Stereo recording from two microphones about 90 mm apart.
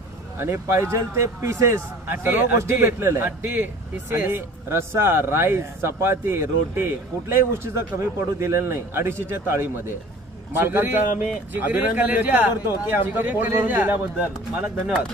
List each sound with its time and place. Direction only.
0.4 s a man's voice: 30° right (ahead or behind)